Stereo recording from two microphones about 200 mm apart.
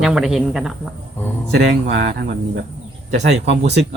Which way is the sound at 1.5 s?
60° right (ahead or behind).